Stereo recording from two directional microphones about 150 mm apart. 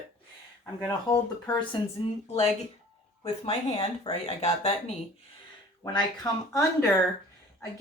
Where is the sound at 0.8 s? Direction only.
25° left (ahead or behind).